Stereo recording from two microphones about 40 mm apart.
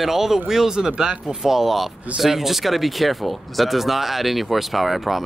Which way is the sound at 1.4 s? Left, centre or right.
Centre.